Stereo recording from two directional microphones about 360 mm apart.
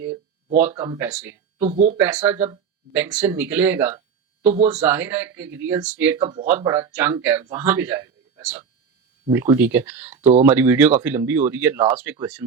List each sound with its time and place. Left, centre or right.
0.6 s speech: centre
1.5 s speech: centre
2.0 s speech: centre
4.7 s speech: centre
10.2 s speech: centre
10.5 s speech: centre